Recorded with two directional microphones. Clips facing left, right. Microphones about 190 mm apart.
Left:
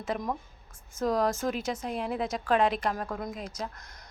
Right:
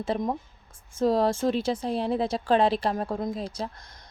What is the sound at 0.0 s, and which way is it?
Speech, 25° right (ahead or behind).